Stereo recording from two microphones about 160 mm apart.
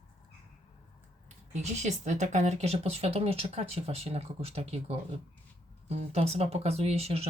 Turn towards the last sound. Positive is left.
turn(degrees=-40)  # may be behind; listen again after turning